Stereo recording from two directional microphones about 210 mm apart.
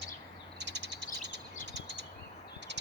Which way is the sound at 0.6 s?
55° right (ahead or behind).